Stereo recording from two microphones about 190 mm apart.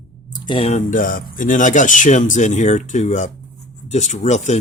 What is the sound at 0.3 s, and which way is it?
Speech, 25° left (ahead or behind).